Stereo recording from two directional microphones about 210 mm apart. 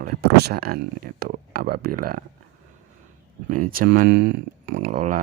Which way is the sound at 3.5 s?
40° right (ahead or behind).